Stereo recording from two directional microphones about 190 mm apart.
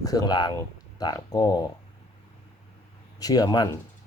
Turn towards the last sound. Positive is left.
turn(degrees=20)  # may be behind; listen again after turning